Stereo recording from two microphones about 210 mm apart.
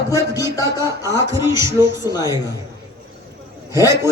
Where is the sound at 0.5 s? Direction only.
15° left (ahead or behind).